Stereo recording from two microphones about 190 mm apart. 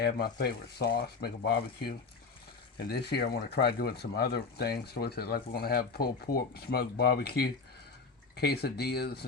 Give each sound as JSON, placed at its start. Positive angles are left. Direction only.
{"t": 0.0, "sound": "speech", "side_deg": 55}